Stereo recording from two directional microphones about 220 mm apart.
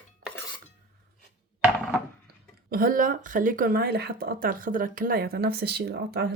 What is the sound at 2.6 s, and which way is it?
Speech, 40° right (ahead or behind).